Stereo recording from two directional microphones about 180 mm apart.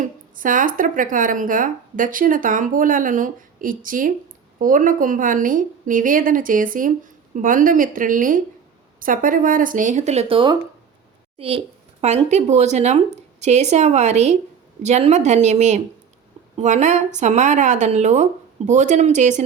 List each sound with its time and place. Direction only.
0.0 s speech: 50° right (ahead or behind)